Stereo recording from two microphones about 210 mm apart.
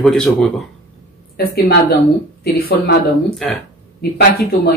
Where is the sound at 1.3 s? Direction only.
50° left (ahead or behind).